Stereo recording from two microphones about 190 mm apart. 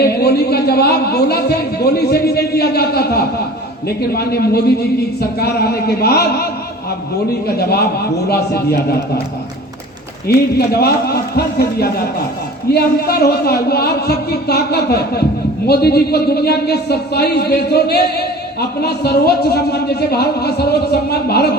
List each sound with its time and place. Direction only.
0.0 s a man's voice: 55° left (ahead or behind)
10.2 s speech: 55° left (ahead or behind)